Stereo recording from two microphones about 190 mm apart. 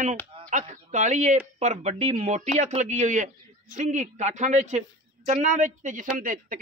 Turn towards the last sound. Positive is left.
turn(degrees=-45)  # may be behind; listen again after turning